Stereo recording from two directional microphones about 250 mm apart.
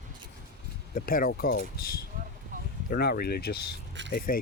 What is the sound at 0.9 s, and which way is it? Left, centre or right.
Speech, left.